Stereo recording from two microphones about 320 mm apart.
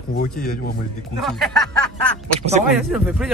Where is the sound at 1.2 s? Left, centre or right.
Centre.